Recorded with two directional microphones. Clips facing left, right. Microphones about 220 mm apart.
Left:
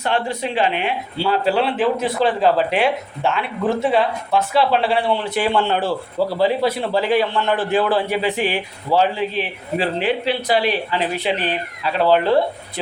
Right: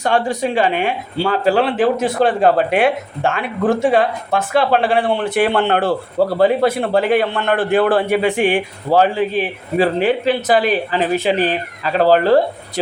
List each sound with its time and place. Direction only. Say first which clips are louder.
0.4 s speech: right 4 dB; 50° right (ahead or behind)